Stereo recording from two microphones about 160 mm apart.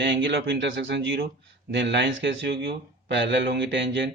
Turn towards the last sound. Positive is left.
turn(degrees=-90)